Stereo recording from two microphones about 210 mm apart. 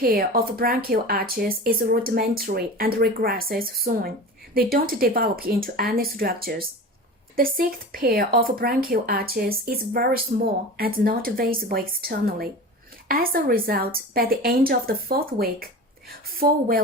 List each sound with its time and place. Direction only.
0.0 s speech: 45° right (ahead or behind)